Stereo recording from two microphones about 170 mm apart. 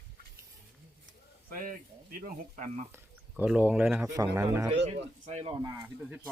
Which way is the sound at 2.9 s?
10° right (ahead or behind).